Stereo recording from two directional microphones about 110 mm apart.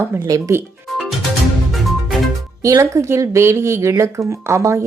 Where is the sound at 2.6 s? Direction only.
30° right (ahead or behind).